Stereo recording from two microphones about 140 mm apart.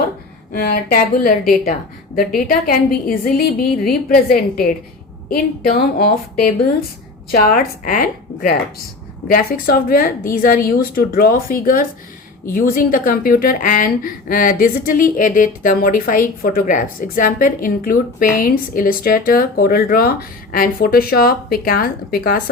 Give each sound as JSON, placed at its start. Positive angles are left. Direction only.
{"t": 0.5, "sound": "a woman's voice", "side_deg": 90}
{"t": 7.3, "sound": "a woman's voice", "side_deg": 90}